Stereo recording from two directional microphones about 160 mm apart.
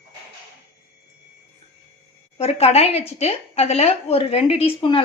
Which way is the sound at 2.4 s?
40° left (ahead or behind).